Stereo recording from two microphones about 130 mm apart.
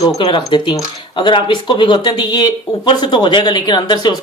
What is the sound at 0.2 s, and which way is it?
Speech, 40° left (ahead or behind).